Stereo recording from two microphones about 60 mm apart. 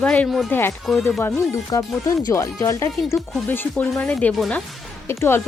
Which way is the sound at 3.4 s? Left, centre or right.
Left.